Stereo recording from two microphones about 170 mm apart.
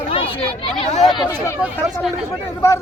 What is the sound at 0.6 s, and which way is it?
Speech, 35° left (ahead or behind).